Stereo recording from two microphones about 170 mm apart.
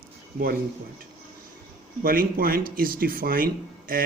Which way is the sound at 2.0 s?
60° right (ahead or behind).